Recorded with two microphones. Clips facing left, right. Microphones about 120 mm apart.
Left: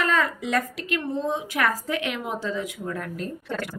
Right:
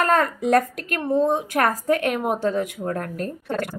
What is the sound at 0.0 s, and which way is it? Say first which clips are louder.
A woman's voice: right 5 dB; 50° right (ahead or behind).